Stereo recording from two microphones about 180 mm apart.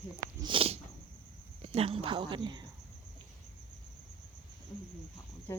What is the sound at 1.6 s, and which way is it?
Speech, 35° right (ahead or behind).